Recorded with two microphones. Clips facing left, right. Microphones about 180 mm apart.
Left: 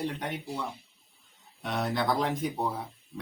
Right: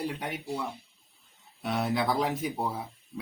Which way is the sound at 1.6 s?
5° right (ahead or behind).